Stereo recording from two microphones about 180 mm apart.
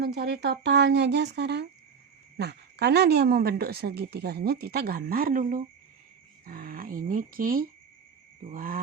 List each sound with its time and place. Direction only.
0.0 s speech: 65° right (ahead or behind)
8.4 s wild animals: 50° right (ahead or behind)